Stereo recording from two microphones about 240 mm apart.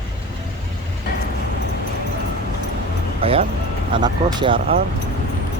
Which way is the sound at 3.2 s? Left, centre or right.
Right.